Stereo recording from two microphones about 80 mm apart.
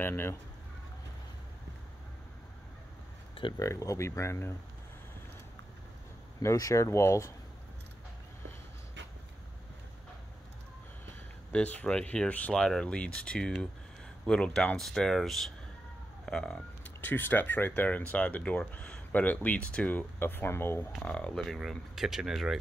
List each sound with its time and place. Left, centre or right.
0.0 s speech: left
3.5 s speech: left
6.4 s speech: left
11.5 s speech: centre
16.8 s speech: left
21.0 s speech: centre
21.9 s speech: centre